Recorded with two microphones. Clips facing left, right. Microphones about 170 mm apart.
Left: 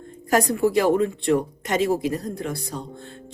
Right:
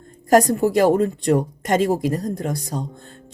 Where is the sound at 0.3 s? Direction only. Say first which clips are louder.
Right 4 dB; 45° right (ahead or behind).